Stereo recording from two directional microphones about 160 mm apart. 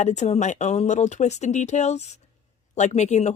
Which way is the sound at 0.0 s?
45° left (ahead or behind).